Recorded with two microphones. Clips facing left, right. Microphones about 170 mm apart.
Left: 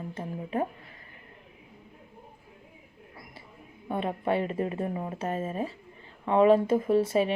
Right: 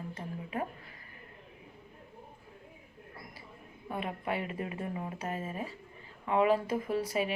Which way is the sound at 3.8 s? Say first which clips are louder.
Left 7 dB; 30° left (ahead or behind).